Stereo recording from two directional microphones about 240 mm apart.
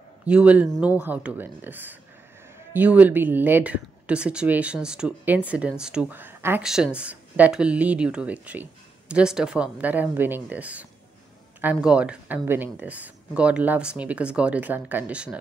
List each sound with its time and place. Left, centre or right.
0.2 s speech: centre